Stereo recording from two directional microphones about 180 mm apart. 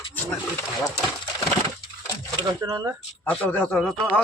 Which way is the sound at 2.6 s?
20° right (ahead or behind).